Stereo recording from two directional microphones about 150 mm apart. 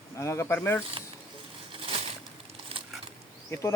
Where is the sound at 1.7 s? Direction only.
40° right (ahead or behind).